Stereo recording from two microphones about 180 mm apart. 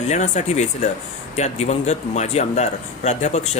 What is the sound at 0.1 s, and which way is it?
Speech, 40° left (ahead or behind).